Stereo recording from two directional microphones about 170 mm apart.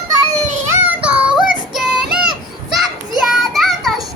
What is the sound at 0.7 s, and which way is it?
Child singing, 10° right (ahead or behind).